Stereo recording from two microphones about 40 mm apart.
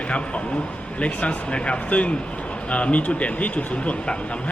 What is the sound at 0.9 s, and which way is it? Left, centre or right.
A man's voice, left.